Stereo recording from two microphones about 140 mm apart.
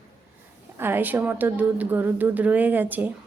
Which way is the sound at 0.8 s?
15° right (ahead or behind).